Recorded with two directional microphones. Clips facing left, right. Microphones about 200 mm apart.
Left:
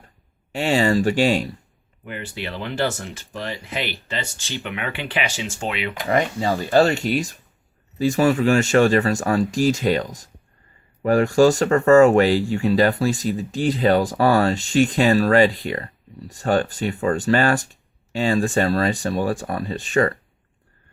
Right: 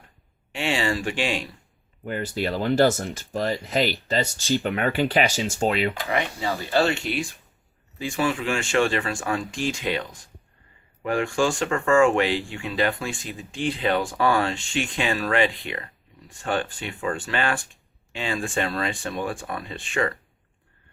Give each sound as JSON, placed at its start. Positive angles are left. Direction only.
{"t": 0.5, "sound": "speech", "side_deg": 40}
{"t": 2.0, "sound": "speech", "side_deg": -40}
{"t": 6.1, "sound": "speech", "side_deg": 35}